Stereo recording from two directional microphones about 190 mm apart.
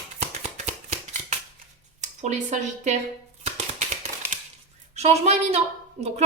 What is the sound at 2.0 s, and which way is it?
Speech, 40° right (ahead or behind).